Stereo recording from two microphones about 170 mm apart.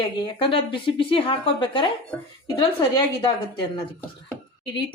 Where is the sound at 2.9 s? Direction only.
25° left (ahead or behind).